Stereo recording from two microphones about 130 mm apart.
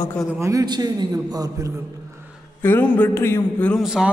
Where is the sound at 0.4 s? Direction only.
30° right (ahead or behind).